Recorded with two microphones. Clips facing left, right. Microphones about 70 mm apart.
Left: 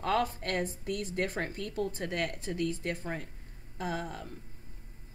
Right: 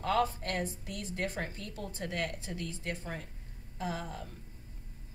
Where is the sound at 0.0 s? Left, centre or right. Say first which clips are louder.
Even; left.